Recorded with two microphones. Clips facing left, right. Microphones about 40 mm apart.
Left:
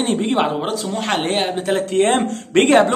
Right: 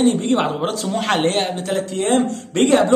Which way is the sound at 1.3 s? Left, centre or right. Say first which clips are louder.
Left 1 dB; centre.